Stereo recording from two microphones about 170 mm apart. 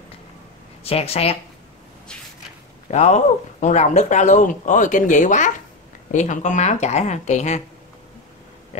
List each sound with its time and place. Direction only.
0.8 s speech: 35° left (ahead or behind)
2.9 s speech: 40° left (ahead or behind)